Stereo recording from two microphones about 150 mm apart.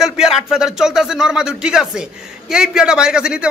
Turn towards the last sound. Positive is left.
turn(degrees=-5)  # may be behind; listen again after turning